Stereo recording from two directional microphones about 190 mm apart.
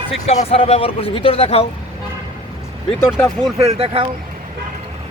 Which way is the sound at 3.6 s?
30° right (ahead or behind).